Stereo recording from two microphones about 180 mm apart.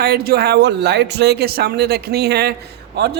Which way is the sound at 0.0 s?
60° right (ahead or behind).